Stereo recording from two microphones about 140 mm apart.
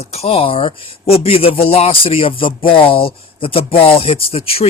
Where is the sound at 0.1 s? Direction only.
45° left (ahead or behind).